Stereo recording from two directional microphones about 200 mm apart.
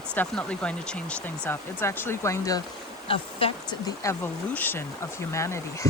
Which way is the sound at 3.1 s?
25° left (ahead or behind).